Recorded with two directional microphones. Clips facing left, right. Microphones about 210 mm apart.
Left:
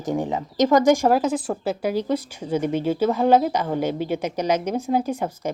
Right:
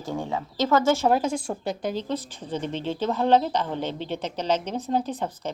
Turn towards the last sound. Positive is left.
turn(degrees=10)  # may be behind; listen again after turning